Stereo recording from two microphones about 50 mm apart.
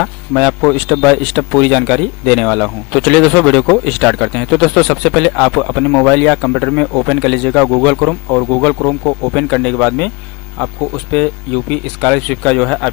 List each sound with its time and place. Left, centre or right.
0.6 s speech: centre
6.0 s speech: left
6.5 s speech: centre
8.5 s speech: left
8.8 s speech: centre